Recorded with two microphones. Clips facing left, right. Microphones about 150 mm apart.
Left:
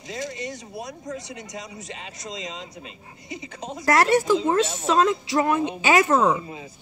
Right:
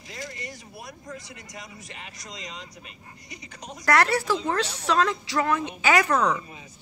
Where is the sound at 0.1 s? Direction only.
20° left (ahead or behind).